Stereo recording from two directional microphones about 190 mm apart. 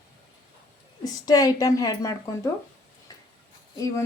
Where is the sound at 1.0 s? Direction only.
20° left (ahead or behind).